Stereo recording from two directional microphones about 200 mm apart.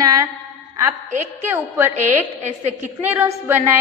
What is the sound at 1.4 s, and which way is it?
A woman's voice, 10° right (ahead or behind).